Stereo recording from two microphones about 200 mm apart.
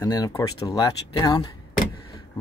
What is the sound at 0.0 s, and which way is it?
Speech, 15° left (ahead or behind).